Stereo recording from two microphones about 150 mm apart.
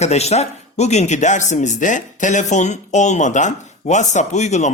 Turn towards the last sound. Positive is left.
turn(degrees=50)  # may be behind; listen again after turning